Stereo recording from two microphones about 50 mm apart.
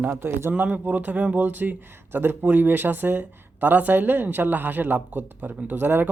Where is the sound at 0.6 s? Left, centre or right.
Right.